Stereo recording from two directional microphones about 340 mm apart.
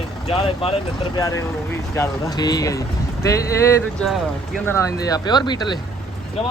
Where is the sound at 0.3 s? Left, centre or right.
Centre.